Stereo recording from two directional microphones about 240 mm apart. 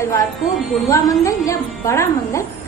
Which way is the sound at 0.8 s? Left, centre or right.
Centre.